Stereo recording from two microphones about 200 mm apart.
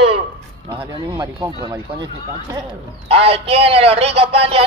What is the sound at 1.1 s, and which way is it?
Speech, 15° right (ahead or behind).